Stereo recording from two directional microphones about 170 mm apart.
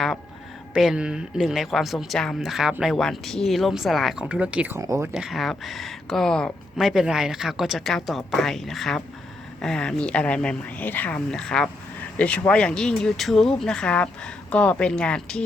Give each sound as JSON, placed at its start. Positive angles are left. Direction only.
{"t": 0.7, "sound": "speech", "side_deg": -5}
{"t": 4.8, "sound": "speech", "side_deg": -20}
{"t": 5.1, "sound": "speech", "side_deg": 0}